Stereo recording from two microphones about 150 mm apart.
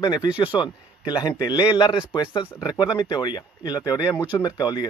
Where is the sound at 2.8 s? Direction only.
30° left (ahead or behind).